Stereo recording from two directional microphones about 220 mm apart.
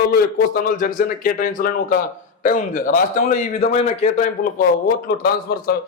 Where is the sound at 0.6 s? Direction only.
40° left (ahead or behind).